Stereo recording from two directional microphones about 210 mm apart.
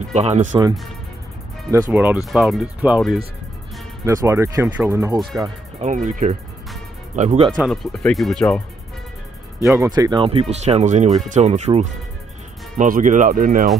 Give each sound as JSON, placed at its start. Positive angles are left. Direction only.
{"t": 0.1, "sound": "speech", "side_deg": -35}
{"t": 1.7, "sound": "speech", "side_deg": -10}
{"t": 4.0, "sound": "speech", "side_deg": -15}
{"t": 5.8, "sound": "speech", "side_deg": -35}
{"t": 7.5, "sound": "speech", "side_deg": 0}
{"t": 9.8, "sound": "speech", "side_deg": -20}